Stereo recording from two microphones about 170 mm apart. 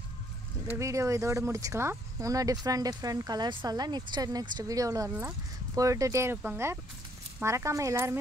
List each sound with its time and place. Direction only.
0.7 s speech: 20° right (ahead or behind)